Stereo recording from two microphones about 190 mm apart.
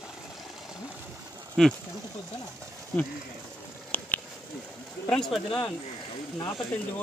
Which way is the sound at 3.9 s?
10° left (ahead or behind).